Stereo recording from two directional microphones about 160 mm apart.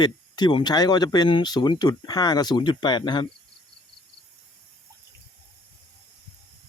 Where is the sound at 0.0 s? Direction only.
25° left (ahead or behind).